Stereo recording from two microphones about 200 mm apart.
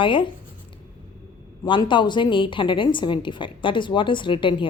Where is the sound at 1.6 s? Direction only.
25° left (ahead or behind).